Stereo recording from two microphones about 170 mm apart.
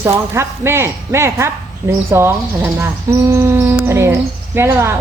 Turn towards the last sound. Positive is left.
turn(degrees=-15)  # may be behind; listen again after turning